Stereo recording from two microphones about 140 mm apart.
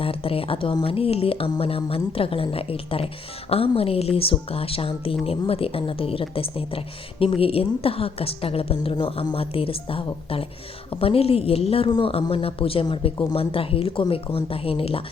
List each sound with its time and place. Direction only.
0.0 s a woman's voice: 40° left (ahead or behind)